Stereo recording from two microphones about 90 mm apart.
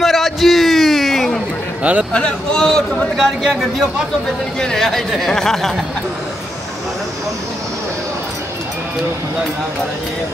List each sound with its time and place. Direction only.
0.0 s a sound: centre (ahead or behind)
1.8 s speech: 15° right (ahead or behind)
2.1 s a man's voice: 10° left (ahead or behind)
4.6 s speech: 5° left (ahead or behind)